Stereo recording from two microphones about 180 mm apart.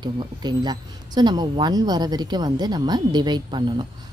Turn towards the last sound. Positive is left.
turn(degrees=-25)  # may be behind; listen again after turning